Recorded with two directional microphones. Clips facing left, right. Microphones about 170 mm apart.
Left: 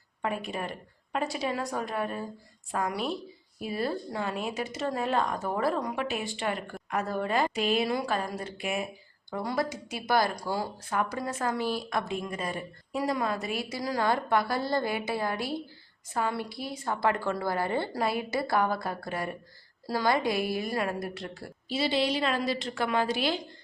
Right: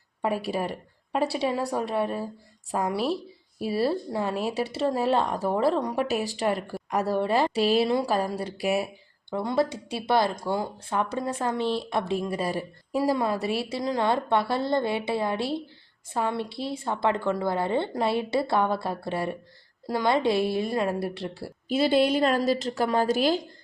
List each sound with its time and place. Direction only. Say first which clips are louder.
0.2 s a woman's voice: right 5 dB; 35° right (ahead or behind)
2.7 s a woman's voice: right 4 dB; 30° right (ahead or behind)
5.9 s a woman's voice: right 5 dB; 40° right (ahead or behind)
9.3 s speech: right 5 dB; 25° right (ahead or behind)
21.7 s a woman's voice: right 6 dB; 50° right (ahead or behind)